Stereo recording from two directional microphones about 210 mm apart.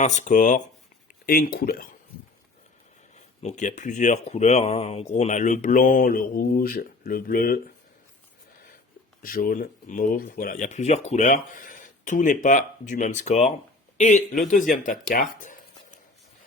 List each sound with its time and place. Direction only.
0.0 s speech: 35° left (ahead or behind)
3.4 s speech: 35° left (ahead or behind)
9.2 s speech: 45° left (ahead or behind)